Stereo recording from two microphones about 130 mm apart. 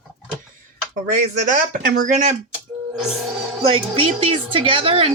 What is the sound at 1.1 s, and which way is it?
Speech, 90° right.